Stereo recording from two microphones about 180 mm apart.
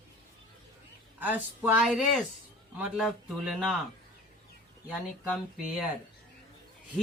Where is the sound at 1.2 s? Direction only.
10° right (ahead or behind).